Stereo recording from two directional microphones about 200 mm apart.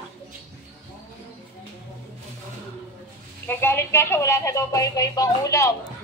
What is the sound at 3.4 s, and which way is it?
Speech, 10° left (ahead or behind).